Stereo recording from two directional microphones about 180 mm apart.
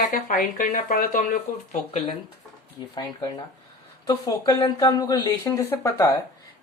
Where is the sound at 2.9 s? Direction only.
25° left (ahead or behind).